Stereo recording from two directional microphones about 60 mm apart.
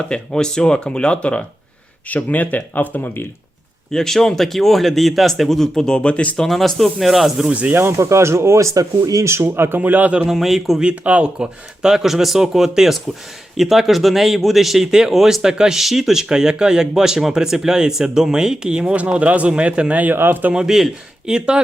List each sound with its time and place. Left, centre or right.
0.1 s speech: centre; by 3.2 s left
3.9 s speech: centre
6.4 s speech: centre
7.5 s a man's voice: right
7.8 s speech: right
8.7 s speech: right
9.4 s speech: right
10.3 s speech: centre
10.8 s a man's voice: right
20.0 s speech: right
20.5 s speech: centre